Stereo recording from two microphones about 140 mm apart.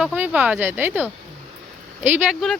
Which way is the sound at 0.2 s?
10° right (ahead or behind).